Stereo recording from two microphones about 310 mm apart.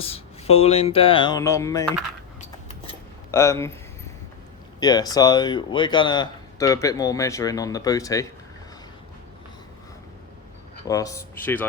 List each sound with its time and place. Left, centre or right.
0.0 s speech: centre
3.3 s speech: centre
4.8 s speech: centre
10.8 s speech: centre